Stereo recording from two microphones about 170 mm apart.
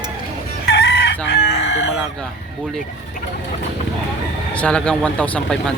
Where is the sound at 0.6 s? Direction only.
85° left.